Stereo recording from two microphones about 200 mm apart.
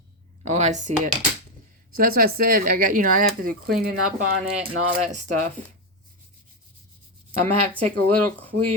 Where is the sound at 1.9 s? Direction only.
50° right (ahead or behind).